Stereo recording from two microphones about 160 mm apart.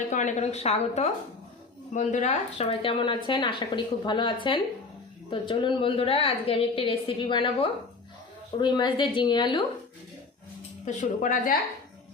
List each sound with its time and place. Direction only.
0.1 s a woman's voice: 50° left (ahead or behind); by 9.6 s 30° left (ahead or behind)
10.8 s a woman's voice: 55° left (ahead or behind)